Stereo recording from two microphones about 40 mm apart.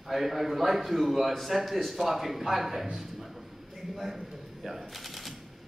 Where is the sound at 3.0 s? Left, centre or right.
Centre.